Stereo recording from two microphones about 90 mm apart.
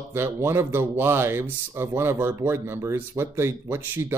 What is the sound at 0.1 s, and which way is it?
Speech, 25° right (ahead or behind).